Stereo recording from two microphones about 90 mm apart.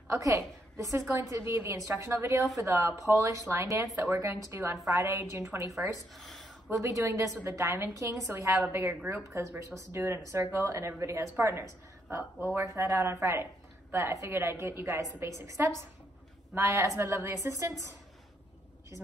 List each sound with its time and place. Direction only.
0.1 s a woman's voice: 35° right (ahead or behind)
6.1 s a sound: centre (ahead or behind)
6.8 s a woman's voice: 30° right (ahead or behind)